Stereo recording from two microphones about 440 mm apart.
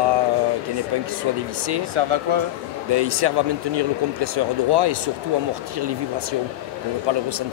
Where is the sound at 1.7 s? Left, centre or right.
Right.